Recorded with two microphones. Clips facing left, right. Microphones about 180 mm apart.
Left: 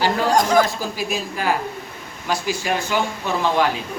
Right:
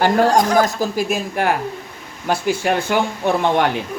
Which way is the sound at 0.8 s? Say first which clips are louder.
Right 5 dB; 50° right (ahead or behind).